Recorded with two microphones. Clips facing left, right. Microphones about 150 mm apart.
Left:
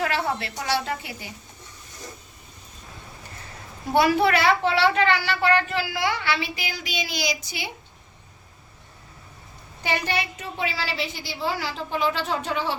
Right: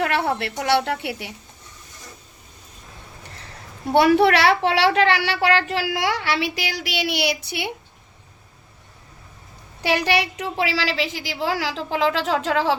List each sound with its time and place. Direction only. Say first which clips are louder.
0.0 s a woman's voice: right 4 dB; 60° right (ahead or behind)
3.9 s a child's voice: right 4 dB; 65° right (ahead or behind)
9.8 s a woman's voice: right 6 dB; 80° right